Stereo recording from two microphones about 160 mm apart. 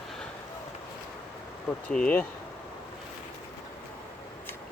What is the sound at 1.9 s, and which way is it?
Speech, 10° left (ahead or behind).